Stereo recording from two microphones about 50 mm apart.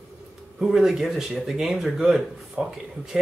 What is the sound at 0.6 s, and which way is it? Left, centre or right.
Speech, centre.